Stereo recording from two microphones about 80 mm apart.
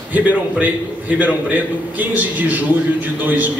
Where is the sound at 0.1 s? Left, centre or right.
Centre.